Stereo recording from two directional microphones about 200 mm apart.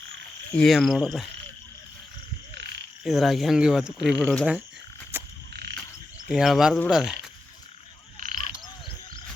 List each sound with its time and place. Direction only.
0.5 s speech: centre (ahead or behind)
3.0 s speech: centre (ahead or behind)
5.1 s frog: 10° right (ahead or behind)
6.2 s speech: centre (ahead or behind)
8.2 s frog: 40° right (ahead or behind)